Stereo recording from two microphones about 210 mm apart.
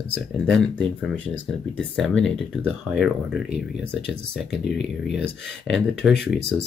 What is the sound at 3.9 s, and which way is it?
Speech, 55° left (ahead or behind).